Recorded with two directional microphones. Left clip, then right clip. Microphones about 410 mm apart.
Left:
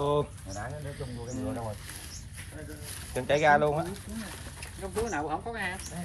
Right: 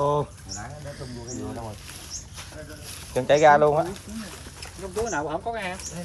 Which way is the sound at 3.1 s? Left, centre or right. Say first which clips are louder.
Right 7 dB; right.